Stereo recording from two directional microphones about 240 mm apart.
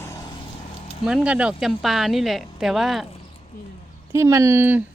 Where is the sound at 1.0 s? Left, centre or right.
Centre.